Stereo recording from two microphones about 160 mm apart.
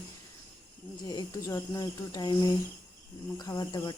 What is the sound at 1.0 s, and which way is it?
Speech, 25° left (ahead or behind).